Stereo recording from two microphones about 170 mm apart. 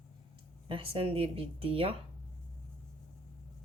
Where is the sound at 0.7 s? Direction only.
35° right (ahead or behind).